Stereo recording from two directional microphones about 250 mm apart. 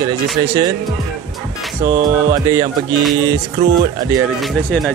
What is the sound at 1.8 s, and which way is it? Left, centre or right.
Speech, centre.